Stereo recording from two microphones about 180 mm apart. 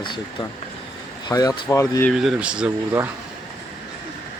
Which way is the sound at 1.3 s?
20° left (ahead or behind).